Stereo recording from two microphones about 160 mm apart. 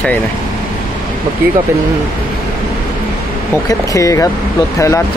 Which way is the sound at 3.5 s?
20° left (ahead or behind).